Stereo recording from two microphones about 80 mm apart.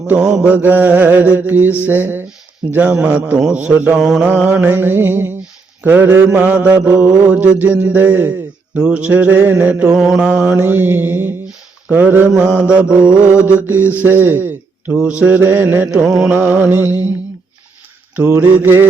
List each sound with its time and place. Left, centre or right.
0.1 s a man's voice: centre
0.5 s mantra: right
3.4 s a man's voice: centre
4.0 s a sound: centre
4.3 s mantra: centre
8.7 s mantra: centre
9.9 s a man's voice: centre
10.2 s mantra: right
16.0 s a man's voice: centre
16.3 s mantra: right
18.3 s mantra: right